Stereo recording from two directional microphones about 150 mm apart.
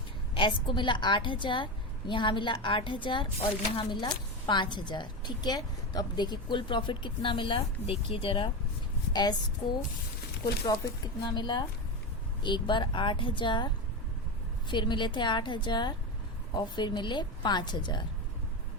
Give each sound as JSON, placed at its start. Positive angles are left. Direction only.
{"t": 0.3, "sound": "a woman's voice", "side_deg": 35}
{"t": 10.4, "sound": "a woman's voice", "side_deg": 25}
{"t": 14.7, "sound": "a woman's voice", "side_deg": 30}